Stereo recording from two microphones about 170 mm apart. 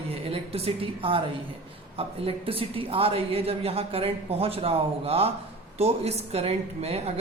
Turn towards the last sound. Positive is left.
turn(degrees=-35)  # may be behind; listen again after turning